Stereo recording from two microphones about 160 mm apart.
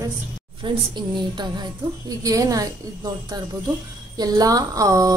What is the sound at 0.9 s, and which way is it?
A woman's voice, 25° right (ahead or behind).